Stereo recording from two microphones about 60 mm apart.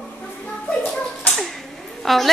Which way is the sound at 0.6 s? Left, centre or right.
Left.